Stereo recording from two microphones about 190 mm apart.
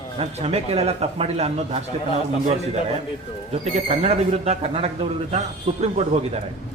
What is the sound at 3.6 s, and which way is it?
A man's voice, 35° right (ahead or behind).